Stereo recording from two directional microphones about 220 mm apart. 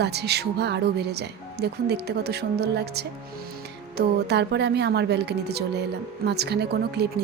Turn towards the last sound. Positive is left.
turn(degrees=-45)  # may be behind; listen again after turning